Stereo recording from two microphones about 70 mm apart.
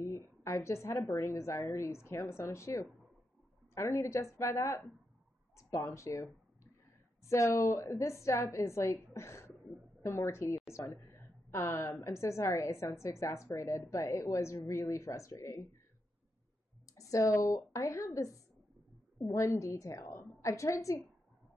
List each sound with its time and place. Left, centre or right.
0.4 s a woman's voice: left
2.0 s a woman's voice: left
16.9 s a woman's voice: left